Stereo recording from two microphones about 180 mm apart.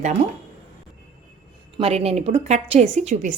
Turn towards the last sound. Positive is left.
turn(degrees=-40)  # may be behind; listen again after turning